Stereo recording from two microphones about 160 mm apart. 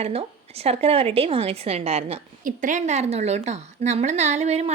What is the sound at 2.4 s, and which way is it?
Speech, 55° right (ahead or behind).